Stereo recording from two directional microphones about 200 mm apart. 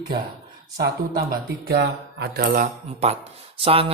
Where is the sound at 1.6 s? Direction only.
55° right (ahead or behind).